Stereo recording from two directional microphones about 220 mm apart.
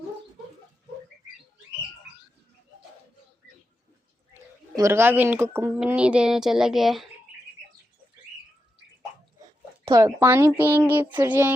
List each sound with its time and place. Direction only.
4.8 s speech: 10° right (ahead or behind)
9.8 s speech: 15° right (ahead or behind)